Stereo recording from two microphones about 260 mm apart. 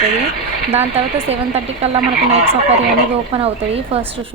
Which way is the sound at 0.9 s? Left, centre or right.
Right.